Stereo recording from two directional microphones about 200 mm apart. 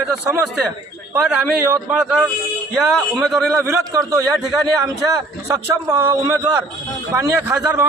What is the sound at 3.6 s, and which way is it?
Speech, 10° right (ahead or behind).